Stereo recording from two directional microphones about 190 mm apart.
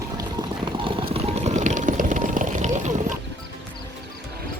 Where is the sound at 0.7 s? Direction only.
30° right (ahead or behind).